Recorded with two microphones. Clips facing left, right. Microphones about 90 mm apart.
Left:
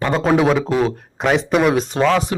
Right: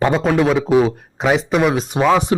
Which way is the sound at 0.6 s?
10° right (ahead or behind).